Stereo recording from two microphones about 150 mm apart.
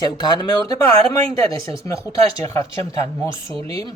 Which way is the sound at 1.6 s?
20° left (ahead or behind).